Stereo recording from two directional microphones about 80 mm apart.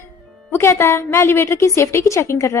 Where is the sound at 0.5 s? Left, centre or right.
Left.